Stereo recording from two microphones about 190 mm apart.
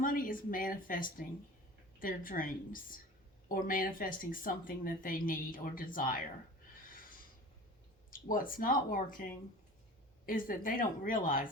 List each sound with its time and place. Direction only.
0.0 s speech: 45° left (ahead or behind)
8.1 s speech: 45° left (ahead or behind)